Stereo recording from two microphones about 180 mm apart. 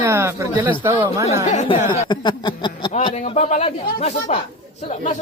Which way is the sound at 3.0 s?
35° left (ahead or behind).